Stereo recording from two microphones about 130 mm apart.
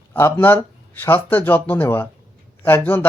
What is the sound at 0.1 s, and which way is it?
Speech, 20° left (ahead or behind).